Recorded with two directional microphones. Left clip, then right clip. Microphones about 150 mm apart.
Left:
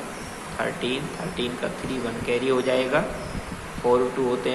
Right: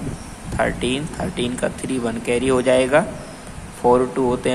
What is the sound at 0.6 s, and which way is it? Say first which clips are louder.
Speech: right 6 dB; 50° right (ahead or behind).